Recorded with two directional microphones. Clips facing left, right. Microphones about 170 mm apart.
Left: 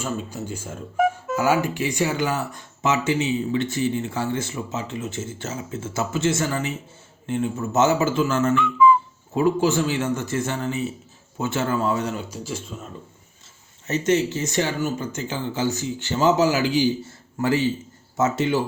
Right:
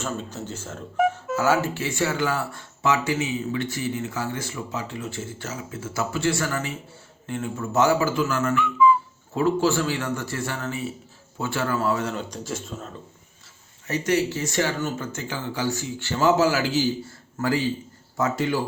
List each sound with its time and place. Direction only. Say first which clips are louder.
0.0 s speech: left 2 dB; 10° left (ahead or behind)
12.3 s speech: even; centre (ahead or behind)
13.8 s speech: left 2 dB; 25° left (ahead or behind)